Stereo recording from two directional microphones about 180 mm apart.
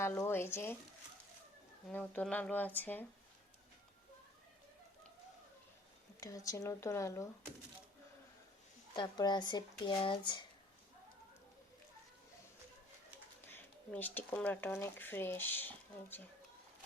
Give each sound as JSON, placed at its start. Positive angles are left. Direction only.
{"t": 0.0, "sound": "speech", "side_deg": 15}
{"t": 1.9, "sound": "speech", "side_deg": 10}
{"t": 6.1, "sound": "speech", "side_deg": 20}
{"t": 9.0, "sound": "speech", "side_deg": 25}
{"t": 13.5, "sound": "speech", "side_deg": 10}